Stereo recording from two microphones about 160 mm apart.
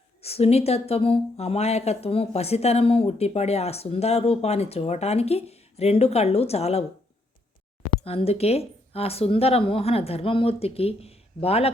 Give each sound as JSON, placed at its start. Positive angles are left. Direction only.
{"t": 0.2, "sound": "speech", "side_deg": 40}
{"t": 8.0, "sound": "speech", "side_deg": 40}